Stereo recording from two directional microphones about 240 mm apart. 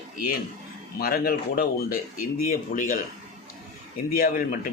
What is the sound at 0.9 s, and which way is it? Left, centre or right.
Speech, left.